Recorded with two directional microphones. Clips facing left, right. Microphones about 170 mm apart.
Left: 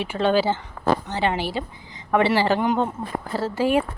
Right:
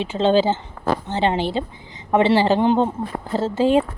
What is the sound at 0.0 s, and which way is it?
A woman's voice, 20° right (ahead or behind).